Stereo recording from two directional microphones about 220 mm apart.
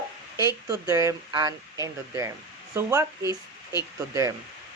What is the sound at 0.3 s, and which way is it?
Speech, 15° right (ahead or behind).